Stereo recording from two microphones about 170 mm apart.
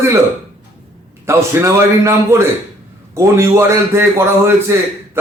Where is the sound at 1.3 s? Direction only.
15° right (ahead or behind).